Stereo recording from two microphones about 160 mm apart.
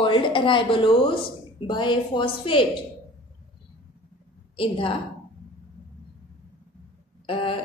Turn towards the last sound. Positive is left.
turn(degrees=35)  # may be behind; listen again after turning